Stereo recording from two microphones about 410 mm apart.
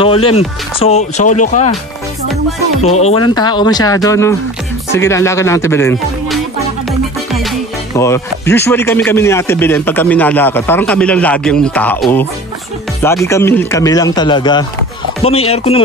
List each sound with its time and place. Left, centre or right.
0.0 s speech: centre
3.0 s speech: centre
7.9 s speech: centre